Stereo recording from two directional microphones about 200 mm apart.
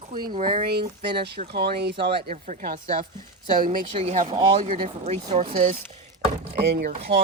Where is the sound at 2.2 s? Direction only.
40° right (ahead or behind).